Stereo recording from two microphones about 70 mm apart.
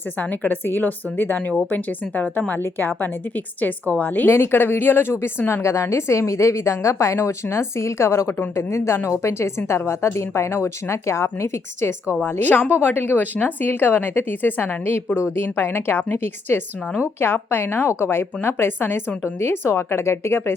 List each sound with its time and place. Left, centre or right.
0.2 s a woman's voice: left